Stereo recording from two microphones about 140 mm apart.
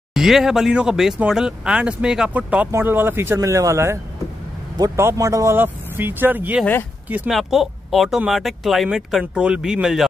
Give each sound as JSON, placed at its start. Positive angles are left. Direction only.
{"t": 0.1, "sound": "speech", "side_deg": 0}
{"t": 6.6, "sound": "speech", "side_deg": 15}
{"t": 7.2, "sound": "speech", "side_deg": 0}